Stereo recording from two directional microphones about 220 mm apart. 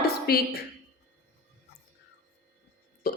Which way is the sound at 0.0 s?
45° left (ahead or behind).